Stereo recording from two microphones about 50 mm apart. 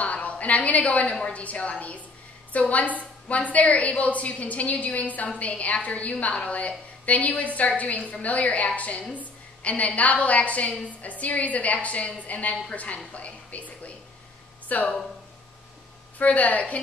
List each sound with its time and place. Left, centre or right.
0.0 s a woman's voice: left
14.7 s a woman's voice: left
16.2 s a woman's voice: left